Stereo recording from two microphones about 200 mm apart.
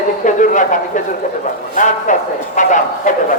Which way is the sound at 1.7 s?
40° left (ahead or behind).